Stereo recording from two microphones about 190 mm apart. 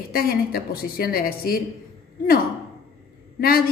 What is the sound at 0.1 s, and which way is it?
Speech, 50° left (ahead or behind).